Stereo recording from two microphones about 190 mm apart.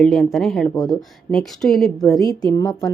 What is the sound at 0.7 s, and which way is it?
Speech, 20° left (ahead or behind).